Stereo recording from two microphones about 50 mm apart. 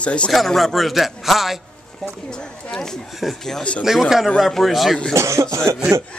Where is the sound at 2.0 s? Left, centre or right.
Centre.